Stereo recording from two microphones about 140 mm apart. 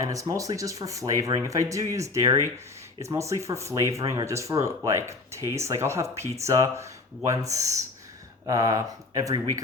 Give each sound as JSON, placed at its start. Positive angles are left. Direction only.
{"t": 0.0, "sound": "speech", "side_deg": -25}